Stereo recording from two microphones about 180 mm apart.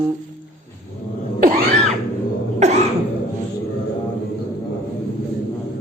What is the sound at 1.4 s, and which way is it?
Cough, 55° right (ahead or behind).